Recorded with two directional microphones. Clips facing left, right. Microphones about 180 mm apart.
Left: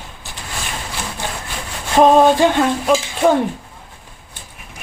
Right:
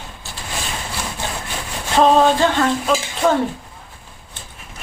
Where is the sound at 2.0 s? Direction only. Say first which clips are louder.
Left 3 dB; 15° left (ahead or behind).